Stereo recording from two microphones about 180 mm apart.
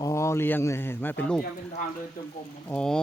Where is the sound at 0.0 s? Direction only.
15° left (ahead or behind).